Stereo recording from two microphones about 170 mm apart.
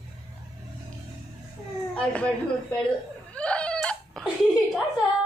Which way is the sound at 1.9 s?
5° left (ahead or behind).